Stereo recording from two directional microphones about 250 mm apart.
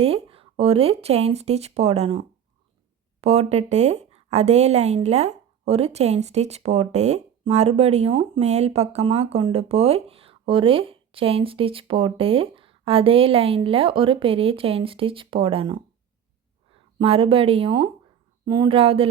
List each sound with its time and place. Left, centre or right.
0.0 s a woman's voice: right